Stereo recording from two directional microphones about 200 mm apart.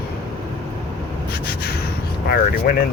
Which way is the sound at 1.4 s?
50° left (ahead or behind).